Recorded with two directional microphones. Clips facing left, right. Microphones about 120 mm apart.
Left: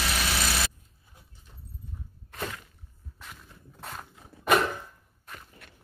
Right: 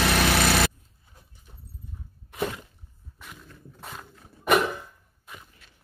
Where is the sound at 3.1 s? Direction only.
Centre (ahead or behind).